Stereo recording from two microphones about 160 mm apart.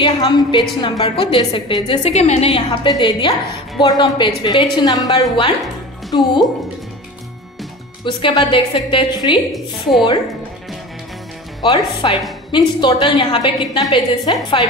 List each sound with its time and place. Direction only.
0.0 s a woman's voice: 30° left (ahead or behind)
8.0 s a woman's voice: 30° left (ahead or behind)
9.5 s a woman's voice: centre (ahead or behind)
11.6 s a woman's voice: 30° left (ahead or behind)